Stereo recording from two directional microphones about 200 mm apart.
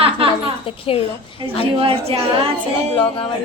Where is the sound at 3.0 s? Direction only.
25° left (ahead or behind).